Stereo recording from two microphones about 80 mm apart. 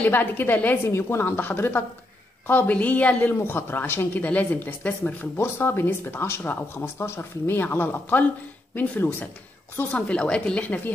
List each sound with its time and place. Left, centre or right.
0.0 s speech: left